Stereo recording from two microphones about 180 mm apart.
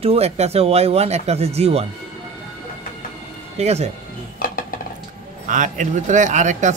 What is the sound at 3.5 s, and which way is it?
Speech, 35° right (ahead or behind).